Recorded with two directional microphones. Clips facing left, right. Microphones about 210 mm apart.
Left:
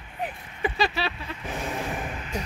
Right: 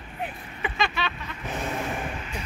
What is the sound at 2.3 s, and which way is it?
Speech, 40° left (ahead or behind).